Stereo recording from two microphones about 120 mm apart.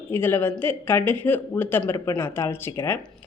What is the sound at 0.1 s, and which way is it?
Speech, 20° left (ahead or behind).